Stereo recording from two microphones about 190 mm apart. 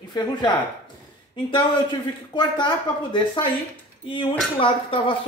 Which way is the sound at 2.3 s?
25° left (ahead or behind).